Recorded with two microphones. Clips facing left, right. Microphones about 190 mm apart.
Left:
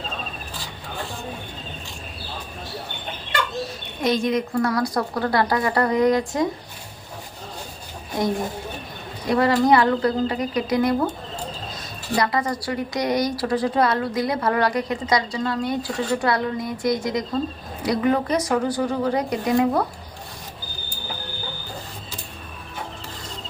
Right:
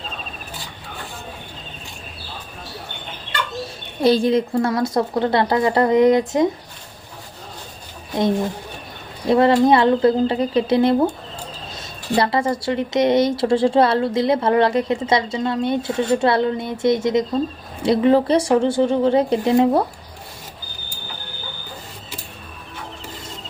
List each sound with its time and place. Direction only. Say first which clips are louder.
4.0 s speech: right 5 dB; 30° right (ahead or behind)
9.3 s speech: right 3 dB; 25° right (ahead or behind)
12.1 s speech: right 4 dB; 30° right (ahead or behind)